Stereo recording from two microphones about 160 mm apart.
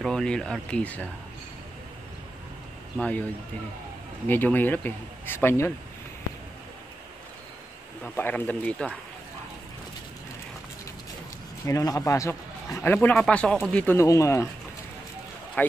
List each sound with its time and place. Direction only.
0.0 s speech: 5° left (ahead or behind)
3.0 s speech: 10° left (ahead or behind)
4.3 s speech: 10° left (ahead or behind)
8.0 s speech: 10° left (ahead or behind)
11.6 s speech: 20° left (ahead or behind)